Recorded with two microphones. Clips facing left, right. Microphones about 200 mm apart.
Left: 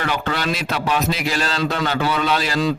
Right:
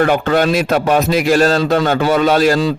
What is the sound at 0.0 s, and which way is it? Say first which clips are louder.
A man's voice: right 10 dB; 50° right (ahead or behind).